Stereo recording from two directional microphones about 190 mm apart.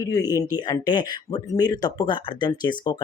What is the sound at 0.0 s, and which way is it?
Speech, 20° left (ahead or behind).